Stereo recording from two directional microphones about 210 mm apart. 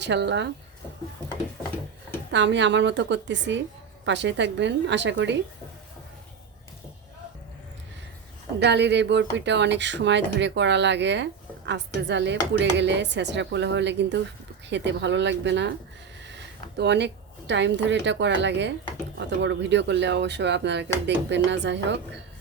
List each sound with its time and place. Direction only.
0.0 s speech: 55° right (ahead or behind)
2.3 s speech: 55° right (ahead or behind)
8.5 s speech: 55° right (ahead or behind)
16.7 s speech: 55° right (ahead or behind)